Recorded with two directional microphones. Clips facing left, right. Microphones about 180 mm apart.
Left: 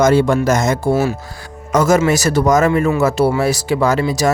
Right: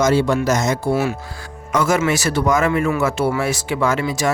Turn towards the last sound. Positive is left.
turn(degrees=35)  # may be behind; listen again after turning